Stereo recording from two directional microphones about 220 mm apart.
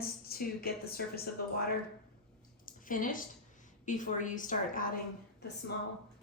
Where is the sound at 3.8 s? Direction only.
35° left (ahead or behind).